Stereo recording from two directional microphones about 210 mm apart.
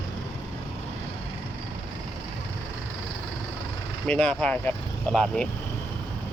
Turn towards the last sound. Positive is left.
turn(degrees=5)  # may be behind; listen again after turning